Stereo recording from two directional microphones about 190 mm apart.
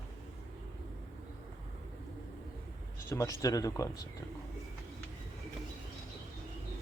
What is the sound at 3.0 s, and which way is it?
Speech, 15° left (ahead or behind).